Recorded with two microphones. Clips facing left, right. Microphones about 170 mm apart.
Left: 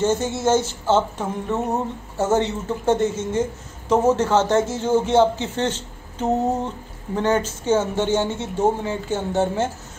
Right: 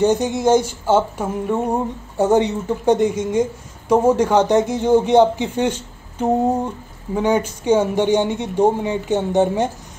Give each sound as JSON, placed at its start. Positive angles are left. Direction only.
{"t": 0.0, "sound": "speech", "side_deg": -15}